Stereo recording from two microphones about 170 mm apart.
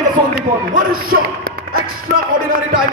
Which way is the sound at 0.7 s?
55° right (ahead or behind).